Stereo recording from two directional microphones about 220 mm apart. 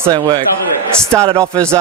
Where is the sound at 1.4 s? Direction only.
15° right (ahead or behind).